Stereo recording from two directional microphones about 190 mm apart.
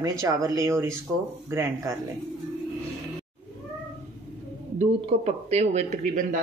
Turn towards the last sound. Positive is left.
turn(degrees=-45)  # may be behind; listen again after turning